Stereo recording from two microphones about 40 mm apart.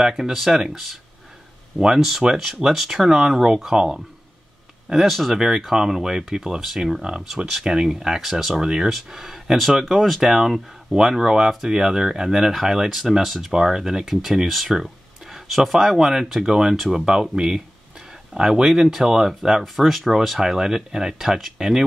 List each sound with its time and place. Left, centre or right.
0.1 s speech: centre
1.8 s speech: centre
5.0 s speech: centre
5.3 s speech: centre
8.5 s speech: centre
19.6 s speech: centre